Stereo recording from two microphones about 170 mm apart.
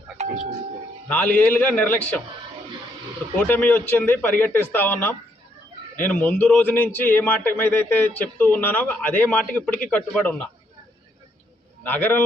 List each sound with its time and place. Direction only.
1.0 s a man's voice: 5° left (ahead or behind)
3.3 s a man's voice: 10° left (ahead or behind)
11.8 s a man's voice: 10° left (ahead or behind)